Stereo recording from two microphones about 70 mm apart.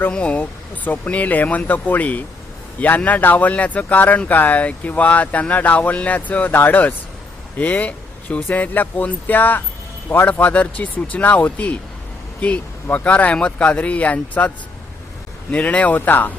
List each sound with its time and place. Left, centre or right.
0.1 s speech: centre
10.4 s speech: left
15.5 s speech: centre